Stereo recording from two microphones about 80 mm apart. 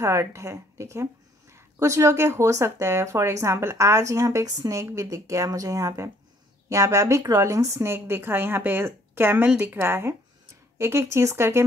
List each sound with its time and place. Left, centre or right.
0.0 s speech: right
4.5 s speech: right